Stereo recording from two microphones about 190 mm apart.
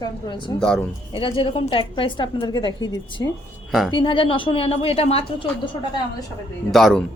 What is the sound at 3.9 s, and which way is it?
A woman's voice, 25° left (ahead or behind).